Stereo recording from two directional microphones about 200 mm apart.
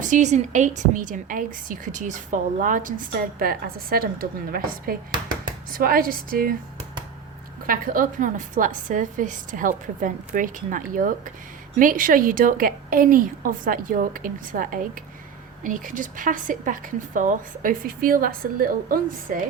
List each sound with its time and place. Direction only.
0.0 s a woman's voice: 40° right (ahead or behind)
7.7 s a woman's voice: 40° right (ahead or behind)